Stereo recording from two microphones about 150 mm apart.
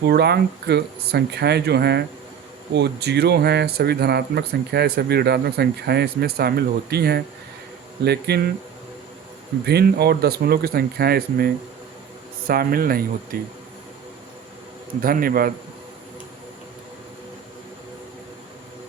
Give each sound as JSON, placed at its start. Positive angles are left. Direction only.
{"t": 0.0, "sound": "speech", "side_deg": -90}
{"t": 9.6, "sound": "speech", "side_deg": -90}
{"t": 12.5, "sound": "a man's voice", "side_deg": -80}
{"t": 15.0, "sound": "a man's voice", "side_deg": -75}